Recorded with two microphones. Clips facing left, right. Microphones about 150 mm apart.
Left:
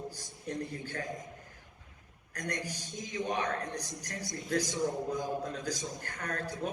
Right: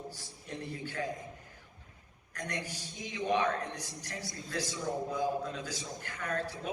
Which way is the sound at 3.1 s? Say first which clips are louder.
Right 3 dB; 40° left (ahead or behind).